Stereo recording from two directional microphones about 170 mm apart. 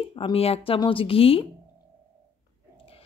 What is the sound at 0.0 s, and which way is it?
Speech, 30° left (ahead or behind).